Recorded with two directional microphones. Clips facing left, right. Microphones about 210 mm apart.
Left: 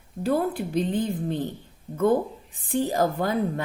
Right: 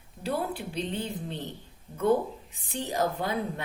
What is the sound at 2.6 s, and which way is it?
Speech, 50° left (ahead or behind).